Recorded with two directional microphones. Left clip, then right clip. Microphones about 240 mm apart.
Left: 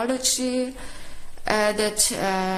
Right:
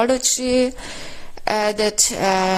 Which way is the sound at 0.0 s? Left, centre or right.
Right.